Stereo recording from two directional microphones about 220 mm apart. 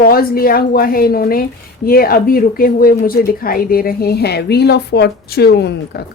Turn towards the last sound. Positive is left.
turn(degrees=45)  # may be behind; listen again after turning